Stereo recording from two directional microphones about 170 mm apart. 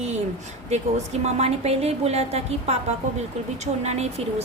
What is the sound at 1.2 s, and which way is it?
A woman's voice, 40° right (ahead or behind).